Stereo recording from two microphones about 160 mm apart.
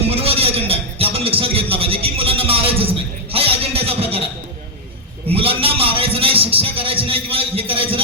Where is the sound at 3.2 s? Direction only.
35° right (ahead or behind).